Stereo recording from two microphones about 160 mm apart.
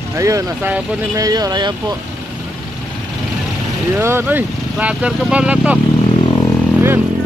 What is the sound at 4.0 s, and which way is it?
Speech, 15° right (ahead or behind).